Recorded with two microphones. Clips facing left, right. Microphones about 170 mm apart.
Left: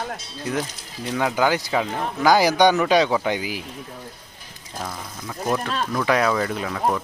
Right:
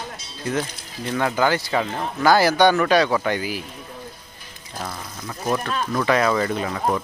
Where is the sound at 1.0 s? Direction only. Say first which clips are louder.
Even; 10° left (ahead or behind).